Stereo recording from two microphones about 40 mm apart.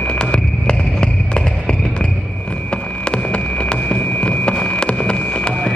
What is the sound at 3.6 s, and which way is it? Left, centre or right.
Music, left.